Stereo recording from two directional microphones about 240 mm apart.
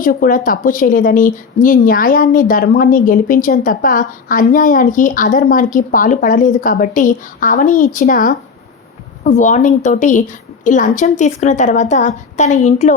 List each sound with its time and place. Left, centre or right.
0.0 s a woman's voice: left